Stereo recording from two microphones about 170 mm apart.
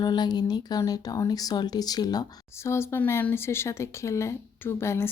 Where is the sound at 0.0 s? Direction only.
25° left (ahead or behind).